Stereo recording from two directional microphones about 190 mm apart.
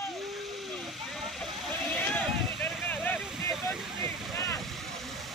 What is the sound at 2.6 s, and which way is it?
Vehicle, 10° left (ahead or behind).